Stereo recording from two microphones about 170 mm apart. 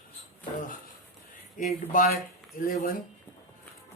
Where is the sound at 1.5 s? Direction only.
50° left (ahead or behind).